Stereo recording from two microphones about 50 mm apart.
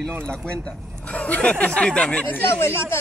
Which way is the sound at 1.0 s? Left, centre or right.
Left.